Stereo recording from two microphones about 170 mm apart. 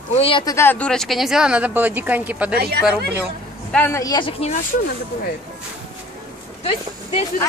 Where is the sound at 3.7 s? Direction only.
10° left (ahead or behind); by 4.5 s 35° left (ahead or behind).